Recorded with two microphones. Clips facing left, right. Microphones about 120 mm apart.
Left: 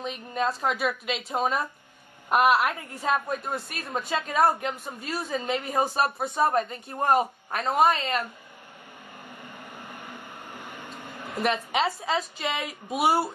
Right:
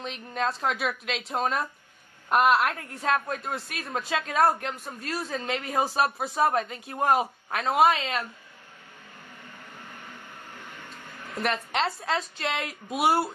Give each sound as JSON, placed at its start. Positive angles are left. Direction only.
{"t": 0.0, "sound": "a woman's voice", "side_deg": 5}
{"t": 9.8, "sound": "vehicle", "side_deg": 15}
{"t": 11.1, "sound": "a sound", "side_deg": 30}
{"t": 11.3, "sound": "a woman's voice", "side_deg": 0}